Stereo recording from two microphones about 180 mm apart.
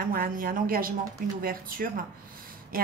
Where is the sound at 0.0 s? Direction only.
55° right (ahead or behind).